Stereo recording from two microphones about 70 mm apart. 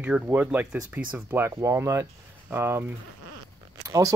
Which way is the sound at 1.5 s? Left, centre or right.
Right.